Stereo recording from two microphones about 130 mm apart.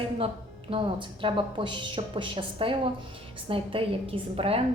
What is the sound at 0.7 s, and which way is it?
A woman's voice, 40° right (ahead or behind).